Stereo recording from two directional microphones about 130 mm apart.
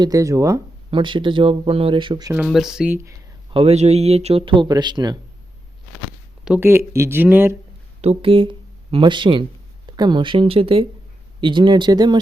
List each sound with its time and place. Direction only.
0.0 s speech: 25° right (ahead or behind)
0.9 s speech: 40° right (ahead or behind)
2.3 s speech: 5° right (ahead or behind)
2.9 s speech: 20° right (ahead or behind)
3.5 s speech: 50° right (ahead or behind); by 5.1 s 35° right (ahead or behind)
6.6 s speech: 20° right (ahead or behind)
8.0 s speech: 45° right (ahead or behind)